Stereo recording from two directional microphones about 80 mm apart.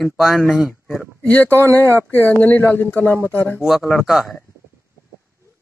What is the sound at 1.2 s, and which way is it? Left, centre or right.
Speech, centre.